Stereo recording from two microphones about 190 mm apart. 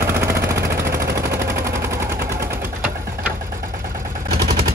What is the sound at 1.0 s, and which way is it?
Machine gun, 15° right (ahead or behind).